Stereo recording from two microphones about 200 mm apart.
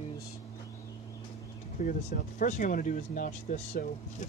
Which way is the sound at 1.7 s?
40° left (ahead or behind).